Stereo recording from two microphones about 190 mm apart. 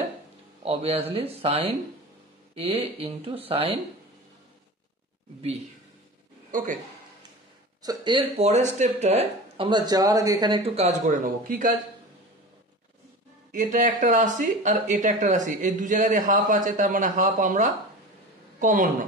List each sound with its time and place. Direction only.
0.7 s speech: 30° right (ahead or behind)
6.5 s speech: 45° right (ahead or behind)
7.8 s speech: 20° right (ahead or behind); by 11.7 s 45° right (ahead or behind)
13.5 s a woman's voice: 45° right (ahead or behind)